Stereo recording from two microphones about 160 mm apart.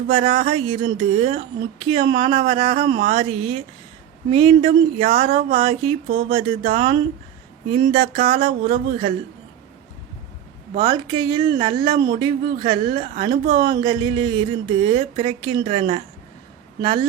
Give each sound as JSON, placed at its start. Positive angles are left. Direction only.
{"t": 0.1, "sound": "speech", "side_deg": -35}
{"t": 10.9, "sound": "a woman's voice", "side_deg": -25}